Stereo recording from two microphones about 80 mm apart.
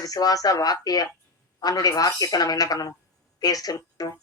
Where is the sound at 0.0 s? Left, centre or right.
Left.